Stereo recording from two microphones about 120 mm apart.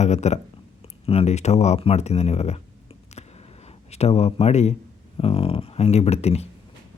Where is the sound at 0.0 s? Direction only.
70° left (ahead or behind).